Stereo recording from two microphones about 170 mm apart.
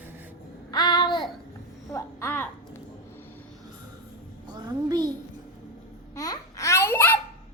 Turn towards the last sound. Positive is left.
turn(degrees=15)  # may be behind; listen again after turning